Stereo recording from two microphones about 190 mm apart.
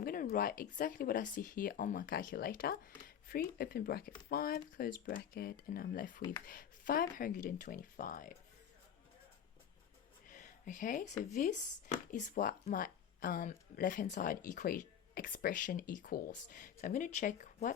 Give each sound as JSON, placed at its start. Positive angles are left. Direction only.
{"t": 0.0, "sound": "speech", "side_deg": 50}
{"t": 10.2, "sound": "a sound", "side_deg": 40}
{"t": 11.2, "sound": "speech", "side_deg": 40}